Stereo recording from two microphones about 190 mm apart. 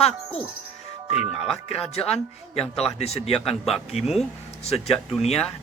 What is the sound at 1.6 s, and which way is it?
Music, 30° left (ahead or behind).